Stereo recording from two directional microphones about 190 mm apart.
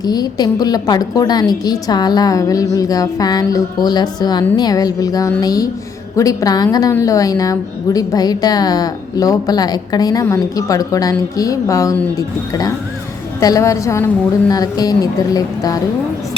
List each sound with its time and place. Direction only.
0.0 s a woman's voice: 20° left (ahead or behind)